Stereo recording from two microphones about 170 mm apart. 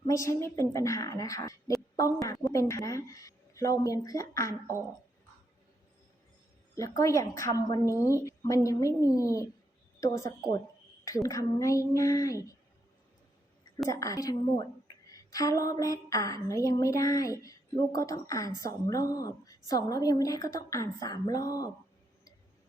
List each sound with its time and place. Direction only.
0.1 s a woman's voice: 15° left (ahead or behind)
7.0 s a woman's voice: 20° left (ahead or behind)
11.0 s a woman's voice: 20° left (ahead or behind)
13.9 s a woman's voice: 20° left (ahead or behind)